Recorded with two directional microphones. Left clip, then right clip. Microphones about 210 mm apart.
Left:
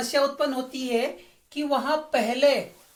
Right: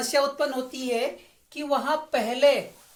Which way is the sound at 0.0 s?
40° right (ahead or behind).